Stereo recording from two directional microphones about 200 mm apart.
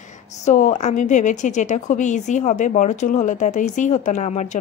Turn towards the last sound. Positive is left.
turn(degrees=35)  # may be behind; listen again after turning